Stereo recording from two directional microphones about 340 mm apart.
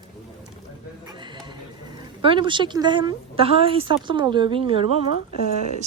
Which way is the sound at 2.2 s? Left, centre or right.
Centre.